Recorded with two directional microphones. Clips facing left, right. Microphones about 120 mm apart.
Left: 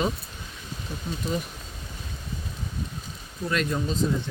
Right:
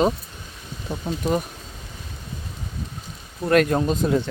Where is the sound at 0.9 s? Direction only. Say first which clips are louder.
Right 7 dB; 60° right (ahead or behind).